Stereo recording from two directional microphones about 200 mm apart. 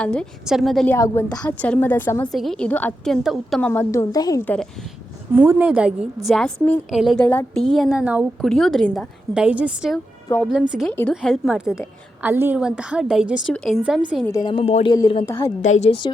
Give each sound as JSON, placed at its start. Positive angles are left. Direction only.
{"t": 0.0, "sound": "a woman's voice", "side_deg": 5}
{"t": 0.9, "sound": "a woman's voice", "side_deg": 15}
{"t": 2.3, "sound": "a woman's voice", "side_deg": 0}
{"t": 3.7, "sound": "a woman's voice", "side_deg": 15}
{"t": 5.3, "sound": "a woman's voice", "side_deg": -10}
{"t": 10.2, "sound": "speech", "side_deg": 10}
{"t": 10.5, "sound": "a woman's voice", "side_deg": -5}
{"t": 14.3, "sound": "speech", "side_deg": 20}
{"t": 14.6, "sound": "speech", "side_deg": 30}
{"t": 14.9, "sound": "speech", "side_deg": 20}